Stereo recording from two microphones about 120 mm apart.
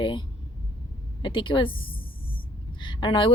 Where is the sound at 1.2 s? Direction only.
45° left (ahead or behind).